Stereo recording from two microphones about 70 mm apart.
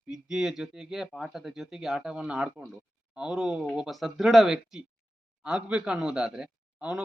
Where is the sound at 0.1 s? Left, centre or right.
Centre.